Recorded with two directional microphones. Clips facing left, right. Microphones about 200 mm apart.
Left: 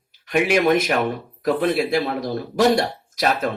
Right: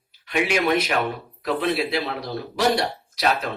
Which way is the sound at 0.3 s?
45° left (ahead or behind).